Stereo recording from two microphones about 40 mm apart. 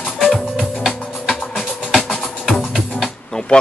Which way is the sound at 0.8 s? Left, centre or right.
Centre.